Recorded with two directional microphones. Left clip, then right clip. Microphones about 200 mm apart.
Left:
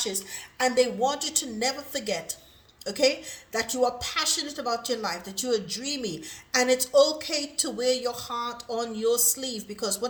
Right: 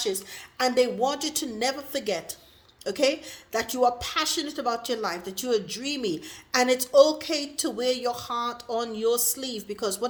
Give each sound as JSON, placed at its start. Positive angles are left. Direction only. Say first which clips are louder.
{"t": 0.6, "sound": "a woman's voice", "louder": "even", "side_deg": -45}